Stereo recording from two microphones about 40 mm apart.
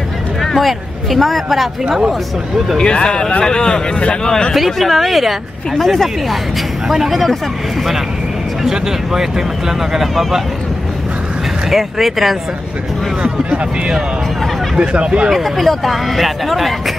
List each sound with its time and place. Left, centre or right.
0.4 s speech: centre
2.8 s speech: left
4.6 s speech: centre
8.6 s speech: centre
11.7 s speech: centre
13.2 s speech: right
15.3 s speech: centre